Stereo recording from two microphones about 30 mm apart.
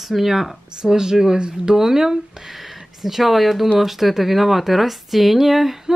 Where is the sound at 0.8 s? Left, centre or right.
Right.